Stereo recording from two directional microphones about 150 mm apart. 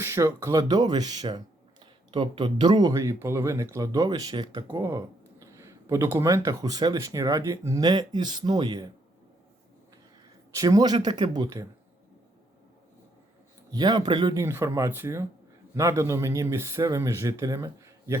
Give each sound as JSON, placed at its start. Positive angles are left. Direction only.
{"t": 0.0, "sound": "speech", "side_deg": -15}
{"t": 10.5, "sound": "speech", "side_deg": -25}
{"t": 13.7, "sound": "speech", "side_deg": -30}
{"t": 14.4, "sound": "speech", "side_deg": -20}